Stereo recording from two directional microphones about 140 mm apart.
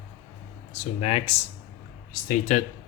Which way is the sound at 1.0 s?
45° left (ahead or behind).